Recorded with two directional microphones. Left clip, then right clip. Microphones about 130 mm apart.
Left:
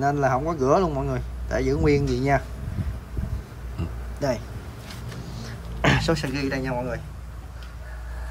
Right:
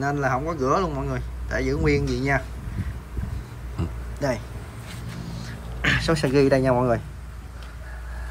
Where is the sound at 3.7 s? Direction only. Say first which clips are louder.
Right 2 dB; 25° left (ahead or behind).